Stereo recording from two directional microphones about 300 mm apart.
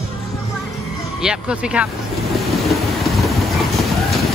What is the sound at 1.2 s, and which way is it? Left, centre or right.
Speech, centre.